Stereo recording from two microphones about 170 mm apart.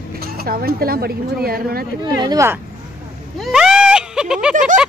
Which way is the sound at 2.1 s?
20° right (ahead or behind).